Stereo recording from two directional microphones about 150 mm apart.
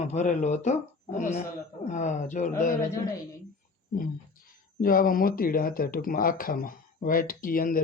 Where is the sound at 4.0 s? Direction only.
70° left (ahead or behind).